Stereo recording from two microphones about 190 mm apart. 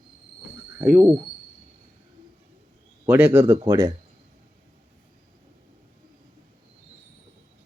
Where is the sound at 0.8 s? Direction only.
5° right (ahead or behind).